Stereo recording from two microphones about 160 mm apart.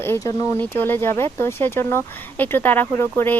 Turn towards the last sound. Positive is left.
turn(degrees=15)  # may be behind; listen again after turning